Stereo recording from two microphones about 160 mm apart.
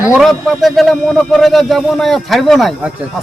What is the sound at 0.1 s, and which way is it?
Speech, centre (ahead or behind).